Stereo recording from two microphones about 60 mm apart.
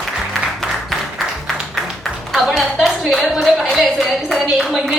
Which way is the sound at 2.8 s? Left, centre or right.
Centre.